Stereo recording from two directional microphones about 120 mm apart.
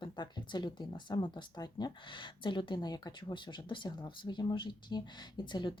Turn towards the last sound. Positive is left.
turn(degrees=40)  # may be behind; listen again after turning